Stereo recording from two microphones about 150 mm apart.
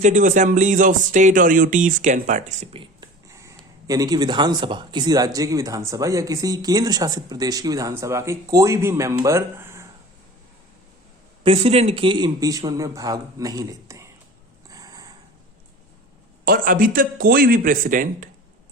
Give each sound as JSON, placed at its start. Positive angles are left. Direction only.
{"t": 0.0, "sound": "speech", "side_deg": -55}
{"t": 3.2, "sound": "a sound", "side_deg": -20}
{"t": 3.8, "sound": "speech", "side_deg": -25}
{"t": 11.4, "sound": "speech", "side_deg": -40}
{"t": 14.7, "sound": "a sound", "side_deg": -25}
{"t": 16.5, "sound": "a man's voice", "side_deg": -65}